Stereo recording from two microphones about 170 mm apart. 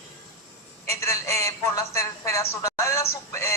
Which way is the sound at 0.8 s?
15° left (ahead or behind).